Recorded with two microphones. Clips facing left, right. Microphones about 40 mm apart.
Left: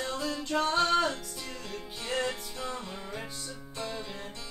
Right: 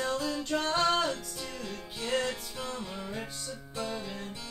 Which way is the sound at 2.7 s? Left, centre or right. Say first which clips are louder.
Right 1 dB; centre.